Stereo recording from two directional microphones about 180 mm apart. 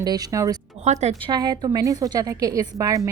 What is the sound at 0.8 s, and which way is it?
Speech, 40° right (ahead or behind).